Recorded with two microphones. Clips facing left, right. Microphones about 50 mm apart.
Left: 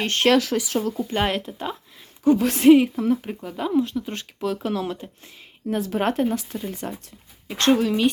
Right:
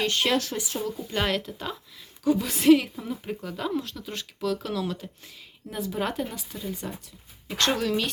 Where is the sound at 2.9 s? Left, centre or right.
Left.